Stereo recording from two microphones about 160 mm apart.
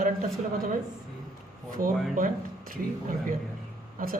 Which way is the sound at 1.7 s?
60° right (ahead or behind).